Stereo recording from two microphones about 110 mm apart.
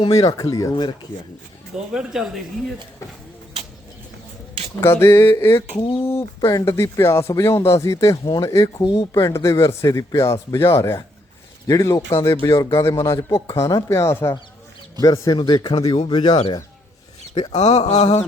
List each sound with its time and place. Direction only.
0.1 s speech: 35° left (ahead or behind)
1.9 s speech: 5° right (ahead or behind)
4.8 s speech: 20° left (ahead or behind)
5.8 s speech: 60° left (ahead or behind)
6.1 s speech: 25° left (ahead or behind)
8.1 s speech: 45° left (ahead or behind)
15.4 s speech: 45° left (ahead or behind)
17.5 s a sound: 85° left; by 18.2 s 65° left (ahead or behind)